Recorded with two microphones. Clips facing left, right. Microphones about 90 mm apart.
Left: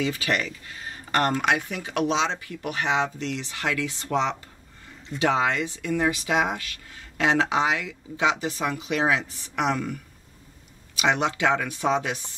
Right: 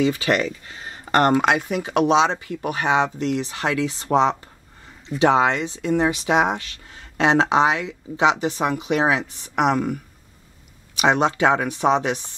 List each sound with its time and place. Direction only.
0.0 s speech: 25° right (ahead or behind); by 9.9 s 45° right (ahead or behind)
11.1 s speech: 25° right (ahead or behind)